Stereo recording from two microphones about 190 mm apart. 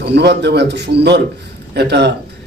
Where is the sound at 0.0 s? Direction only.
60° right (ahead or behind).